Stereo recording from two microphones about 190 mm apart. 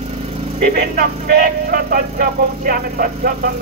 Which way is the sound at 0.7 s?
50° right (ahead or behind).